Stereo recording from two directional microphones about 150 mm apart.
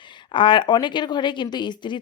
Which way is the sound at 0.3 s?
35° left (ahead or behind).